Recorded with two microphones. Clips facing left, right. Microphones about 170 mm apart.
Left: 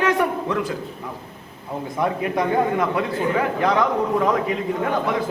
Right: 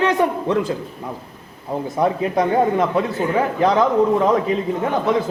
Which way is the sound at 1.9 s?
25° right (ahead or behind).